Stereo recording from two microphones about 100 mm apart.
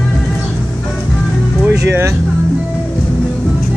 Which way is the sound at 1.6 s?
20° right (ahead or behind).